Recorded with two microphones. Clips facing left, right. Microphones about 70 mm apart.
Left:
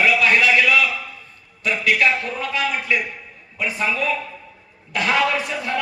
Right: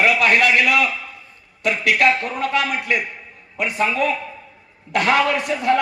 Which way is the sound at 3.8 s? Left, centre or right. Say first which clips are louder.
Right 3 dB; right.